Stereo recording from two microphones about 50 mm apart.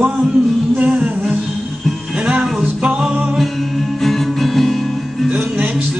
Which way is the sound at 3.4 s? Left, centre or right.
Centre.